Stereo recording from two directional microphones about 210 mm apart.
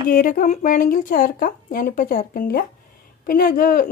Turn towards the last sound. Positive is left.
turn(degrees=40)  # may be behind; listen again after turning